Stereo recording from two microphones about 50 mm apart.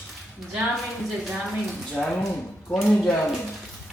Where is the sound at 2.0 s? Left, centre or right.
Centre.